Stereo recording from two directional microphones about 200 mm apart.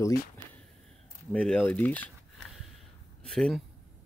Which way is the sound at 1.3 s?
5° left (ahead or behind).